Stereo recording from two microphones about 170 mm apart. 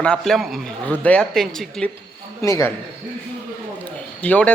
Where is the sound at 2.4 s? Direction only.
15° left (ahead or behind).